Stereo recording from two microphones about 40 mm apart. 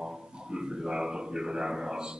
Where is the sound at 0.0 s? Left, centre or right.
Centre.